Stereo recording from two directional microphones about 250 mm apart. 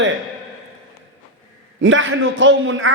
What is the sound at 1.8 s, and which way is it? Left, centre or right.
A man's voice, right.